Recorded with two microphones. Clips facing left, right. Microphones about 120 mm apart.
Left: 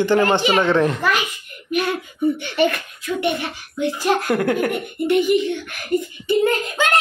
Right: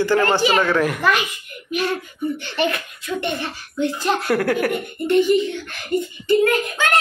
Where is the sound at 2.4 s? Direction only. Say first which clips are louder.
Left 3 dB; 5° left (ahead or behind).